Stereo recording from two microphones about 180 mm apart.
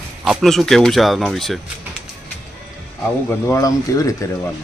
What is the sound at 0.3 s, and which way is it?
Speech, centre (ahead or behind).